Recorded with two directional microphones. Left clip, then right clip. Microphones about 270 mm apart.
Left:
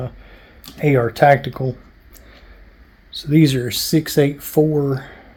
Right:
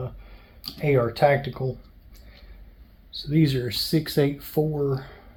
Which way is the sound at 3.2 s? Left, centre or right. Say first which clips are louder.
Left 8 dB; left.